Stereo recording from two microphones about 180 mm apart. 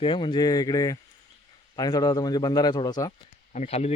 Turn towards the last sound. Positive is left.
turn(degrees=35)  # may be behind; listen again after turning